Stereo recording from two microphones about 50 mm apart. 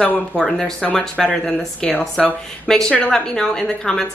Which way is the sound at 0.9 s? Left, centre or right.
Centre.